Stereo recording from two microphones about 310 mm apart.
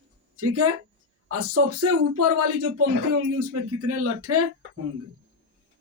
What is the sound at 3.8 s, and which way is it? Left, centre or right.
Speech, right.